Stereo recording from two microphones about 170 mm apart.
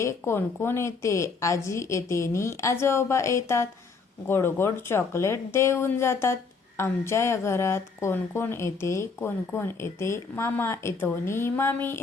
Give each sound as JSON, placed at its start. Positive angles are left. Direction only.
{"t": 0.0, "sound": "speech", "side_deg": 15}